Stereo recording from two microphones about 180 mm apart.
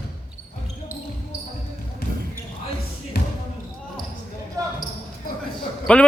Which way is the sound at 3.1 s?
60° left (ahead or behind).